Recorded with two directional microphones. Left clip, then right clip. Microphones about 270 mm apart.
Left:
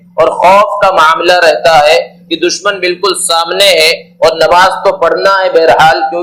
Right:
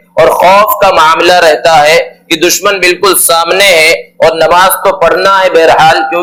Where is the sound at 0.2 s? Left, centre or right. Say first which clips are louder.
Right 2 dB; right.